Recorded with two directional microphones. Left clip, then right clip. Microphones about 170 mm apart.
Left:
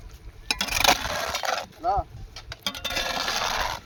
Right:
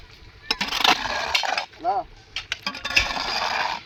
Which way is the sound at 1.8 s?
Centre (ahead or behind).